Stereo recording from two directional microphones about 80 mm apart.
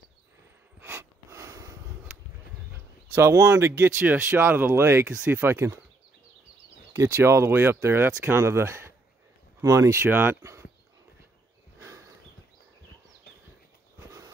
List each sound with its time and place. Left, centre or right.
0.7 s mechanisms: right
1.3 s sniff: right
3.1 s speech: right
6.9 s speech: right
9.6 s speech: right
10.4 s a sound: right
11.8 s horse: right